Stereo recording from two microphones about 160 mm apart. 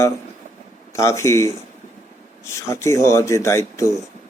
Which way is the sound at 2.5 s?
20° left (ahead or behind).